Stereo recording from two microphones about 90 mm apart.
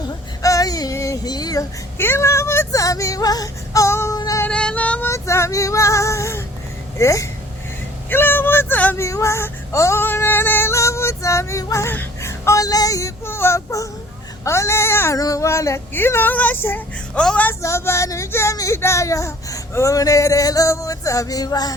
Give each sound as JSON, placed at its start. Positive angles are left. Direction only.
{"t": 0.4, "sound": "child singing", "side_deg": 40}
{"t": 2.0, "sound": "female singing", "side_deg": 25}
{"t": 4.4, "sound": "female singing", "side_deg": 15}
{"t": 5.0, "sound": "speech", "side_deg": 35}
{"t": 7.0, "sound": "female singing", "side_deg": 35}
{"t": 8.1, "sound": "a sound", "side_deg": 25}
{"t": 9.0, "sound": "female singing", "side_deg": 35}
{"t": 14.4, "sound": "speech", "side_deg": 30}
{"t": 15.2, "sound": "female singing", "side_deg": 40}
{"t": 15.9, "sound": "a woman's voice", "side_deg": 25}
{"t": 17.6, "sound": "female singing", "side_deg": 30}